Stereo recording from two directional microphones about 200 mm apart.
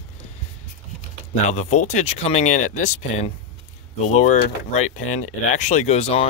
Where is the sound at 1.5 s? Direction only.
35° left (ahead or behind).